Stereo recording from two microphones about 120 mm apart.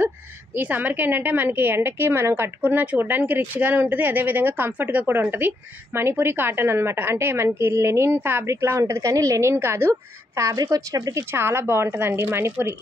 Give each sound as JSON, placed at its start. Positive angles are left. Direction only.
{"t": 0.6, "sound": "a woman's voice", "side_deg": -15}